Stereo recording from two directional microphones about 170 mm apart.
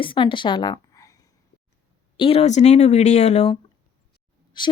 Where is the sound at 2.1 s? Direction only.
30° left (ahead or behind).